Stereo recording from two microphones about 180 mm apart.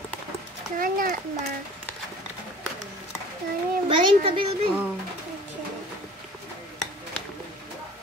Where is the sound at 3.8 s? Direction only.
30° right (ahead or behind).